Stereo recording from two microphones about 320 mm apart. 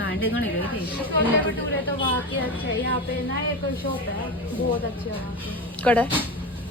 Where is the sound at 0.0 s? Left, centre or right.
Left.